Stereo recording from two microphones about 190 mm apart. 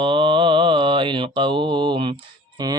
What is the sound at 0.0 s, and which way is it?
Mantra, 25° right (ahead or behind).